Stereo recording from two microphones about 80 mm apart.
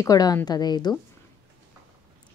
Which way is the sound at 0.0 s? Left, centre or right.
Left.